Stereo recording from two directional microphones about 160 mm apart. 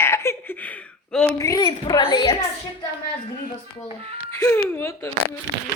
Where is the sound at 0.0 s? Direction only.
15° left (ahead or behind).